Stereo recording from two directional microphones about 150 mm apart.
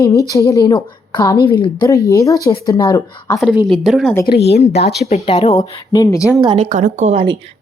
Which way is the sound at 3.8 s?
Centre (ahead or behind).